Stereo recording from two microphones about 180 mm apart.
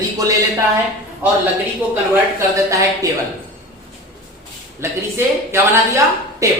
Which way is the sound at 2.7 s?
20° right (ahead or behind).